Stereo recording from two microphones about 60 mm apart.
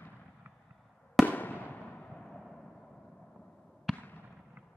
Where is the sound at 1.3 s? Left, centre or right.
Left.